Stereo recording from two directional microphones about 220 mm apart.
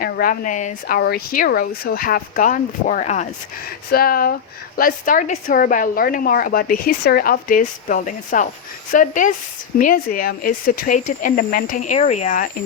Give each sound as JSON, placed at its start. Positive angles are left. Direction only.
{"t": 0.0, "sound": "a woman's voice", "side_deg": 40}